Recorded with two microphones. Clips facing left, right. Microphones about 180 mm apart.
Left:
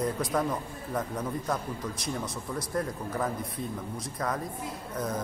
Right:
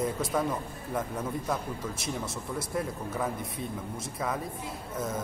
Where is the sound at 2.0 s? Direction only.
25° right (ahead or behind).